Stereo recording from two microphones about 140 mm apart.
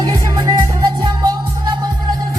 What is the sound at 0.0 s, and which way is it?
Music, 30° right (ahead or behind).